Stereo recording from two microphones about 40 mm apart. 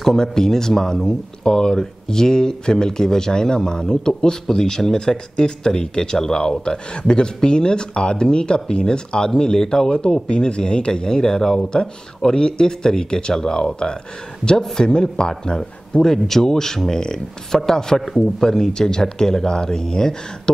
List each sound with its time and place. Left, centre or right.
0.0 s speech: centre